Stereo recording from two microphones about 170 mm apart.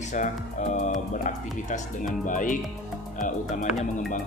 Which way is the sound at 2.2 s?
50° left (ahead or behind).